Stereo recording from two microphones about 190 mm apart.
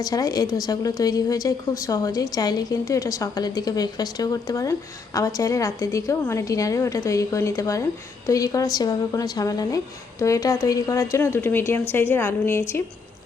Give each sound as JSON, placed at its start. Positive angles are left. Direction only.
{"t": 0.0, "sound": "a woman's voice", "side_deg": 20}